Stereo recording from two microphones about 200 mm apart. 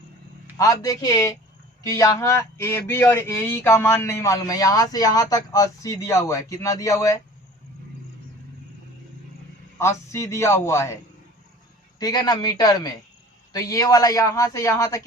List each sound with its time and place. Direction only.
0.6 s speech: 15° left (ahead or behind)
9.7 s speech: 15° left (ahead or behind)
11.9 s a man's voice: 20° left (ahead or behind)